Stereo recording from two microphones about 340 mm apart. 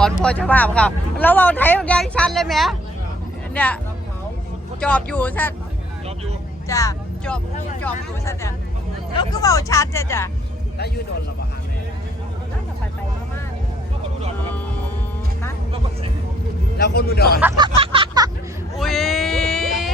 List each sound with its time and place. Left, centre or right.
0.0 s speech: centre
4.8 s speech: centre
6.7 s speech: centre
16.7 s speech: left
17.7 s a sound: centre
18.8 s a sound: centre